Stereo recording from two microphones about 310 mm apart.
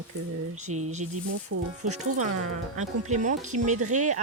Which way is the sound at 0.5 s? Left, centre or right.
Right.